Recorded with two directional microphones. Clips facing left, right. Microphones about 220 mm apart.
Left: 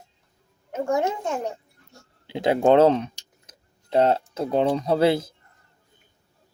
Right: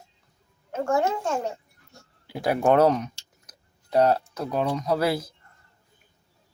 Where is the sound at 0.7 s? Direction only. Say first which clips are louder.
Even; 20° left (ahead or behind).